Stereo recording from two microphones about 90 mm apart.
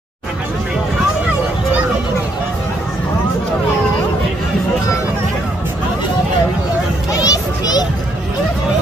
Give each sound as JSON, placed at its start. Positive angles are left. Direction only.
{"t": 7.1, "sound": "children playing", "side_deg": 45}